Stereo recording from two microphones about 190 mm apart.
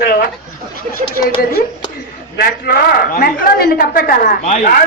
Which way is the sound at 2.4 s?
50° left (ahead or behind).